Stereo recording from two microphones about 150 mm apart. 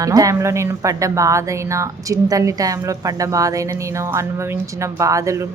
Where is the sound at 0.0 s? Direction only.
25° right (ahead or behind).